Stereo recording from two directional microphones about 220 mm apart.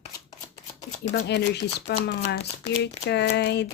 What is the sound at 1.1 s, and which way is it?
Speech, 45° left (ahead or behind).